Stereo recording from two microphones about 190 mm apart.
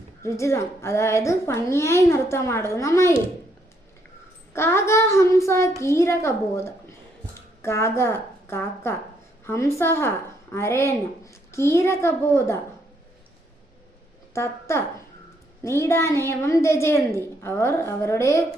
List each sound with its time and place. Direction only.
0.2 s a woman's voice: 15° left (ahead or behind)
4.5 s a woman's voice: 15° left (ahead or behind)
14.3 s a woman's voice: 15° left (ahead or behind)